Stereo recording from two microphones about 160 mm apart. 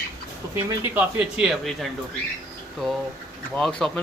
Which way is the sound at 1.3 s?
Centre (ahead or behind).